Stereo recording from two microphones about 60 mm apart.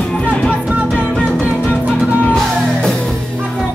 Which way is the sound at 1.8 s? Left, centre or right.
Right.